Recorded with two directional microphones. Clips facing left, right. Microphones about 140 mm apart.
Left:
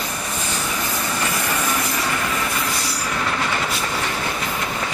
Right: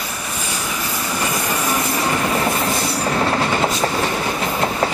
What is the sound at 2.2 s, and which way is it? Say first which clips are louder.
Train: right 5 dB; 35° right (ahead or behind).